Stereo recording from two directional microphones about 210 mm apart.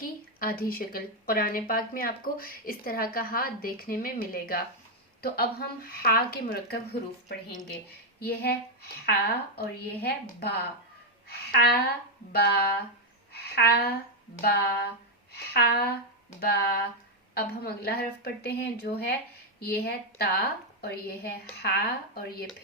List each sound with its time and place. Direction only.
0.0 s a woman's voice: 45° left (ahead or behind)
8.2 s a woman's voice: 50° left (ahead or behind)